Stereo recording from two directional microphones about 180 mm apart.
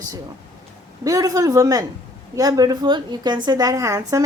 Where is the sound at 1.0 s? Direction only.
20° right (ahead or behind).